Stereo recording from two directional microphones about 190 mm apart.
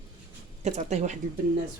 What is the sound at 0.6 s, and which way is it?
Speech, 35° right (ahead or behind).